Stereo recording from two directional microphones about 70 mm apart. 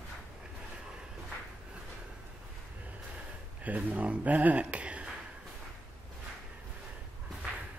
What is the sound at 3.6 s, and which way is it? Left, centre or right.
Speech, right.